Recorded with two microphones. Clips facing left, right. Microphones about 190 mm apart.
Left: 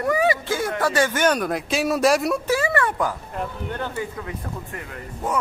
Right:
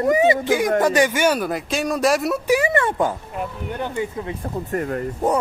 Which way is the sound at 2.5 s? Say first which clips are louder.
Right 6 dB; 20° right (ahead or behind).